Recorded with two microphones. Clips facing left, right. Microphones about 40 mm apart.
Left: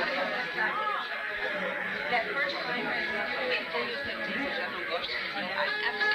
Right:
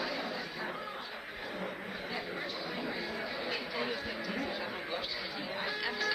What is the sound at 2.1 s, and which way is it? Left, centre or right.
Chatter, left.